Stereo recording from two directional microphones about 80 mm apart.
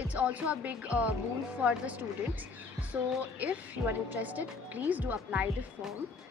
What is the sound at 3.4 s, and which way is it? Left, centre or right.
A woman's voice, centre.